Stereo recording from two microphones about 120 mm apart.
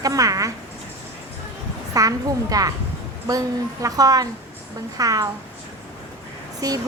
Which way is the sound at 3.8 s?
30° right (ahead or behind).